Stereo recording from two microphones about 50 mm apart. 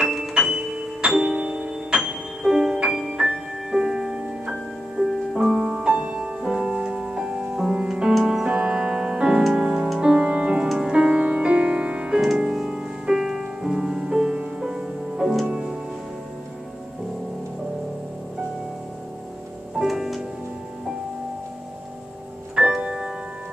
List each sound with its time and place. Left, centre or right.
0.1 s music: centre
6.4 s music: centre
8.1 s music: centre
8.5 s music: centre
19.8 s music: centre
22.8 s tick-tock: centre